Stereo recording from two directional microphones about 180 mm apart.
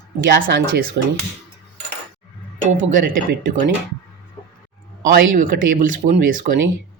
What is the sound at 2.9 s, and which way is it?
Speech, 50° right (ahead or behind).